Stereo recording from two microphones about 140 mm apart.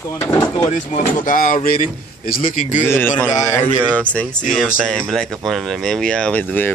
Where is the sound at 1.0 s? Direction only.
75° left (ahead or behind).